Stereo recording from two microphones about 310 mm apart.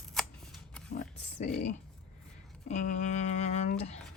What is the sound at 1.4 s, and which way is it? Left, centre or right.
Speech, left.